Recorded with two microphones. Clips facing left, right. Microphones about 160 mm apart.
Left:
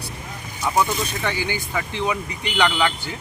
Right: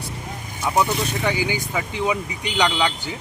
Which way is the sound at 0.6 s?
15° right (ahead or behind).